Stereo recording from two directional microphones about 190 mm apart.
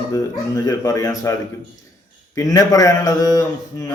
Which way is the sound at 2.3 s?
20° left (ahead or behind).